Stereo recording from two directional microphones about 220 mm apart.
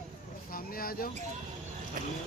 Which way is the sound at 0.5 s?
40° left (ahead or behind).